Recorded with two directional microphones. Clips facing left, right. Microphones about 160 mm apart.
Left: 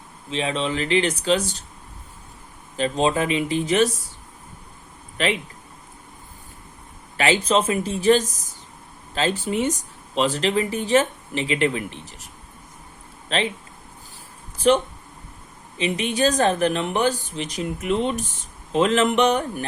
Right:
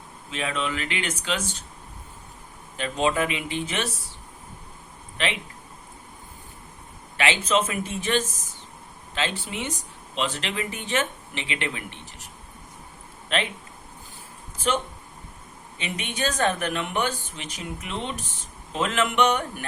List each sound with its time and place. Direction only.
0.3 s speech: 25° left (ahead or behind)
2.7 s speech: 35° left (ahead or behind)
5.1 s speech: 40° left (ahead or behind)
7.2 s speech: 35° left (ahead or behind)
13.2 s speech: 30° left (ahead or behind)
15.8 s speech: 35° left (ahead or behind)